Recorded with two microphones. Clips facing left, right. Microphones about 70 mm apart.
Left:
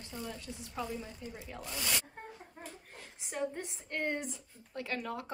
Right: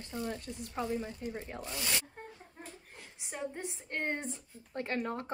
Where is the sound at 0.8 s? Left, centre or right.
Right.